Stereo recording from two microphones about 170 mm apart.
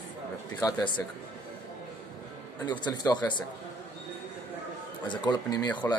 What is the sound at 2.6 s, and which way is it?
Speech, 25° left (ahead or behind).